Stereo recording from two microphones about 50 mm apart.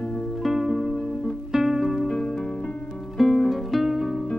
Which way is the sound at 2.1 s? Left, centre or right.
Centre.